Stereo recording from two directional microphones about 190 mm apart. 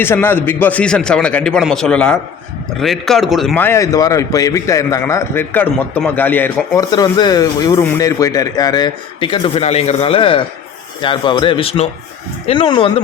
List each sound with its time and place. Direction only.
0.0 s a man's voice: 10° left (ahead or behind)
3.6 s a man's voice: 15° left (ahead or behind)
6.9 s speech: 20° left (ahead or behind)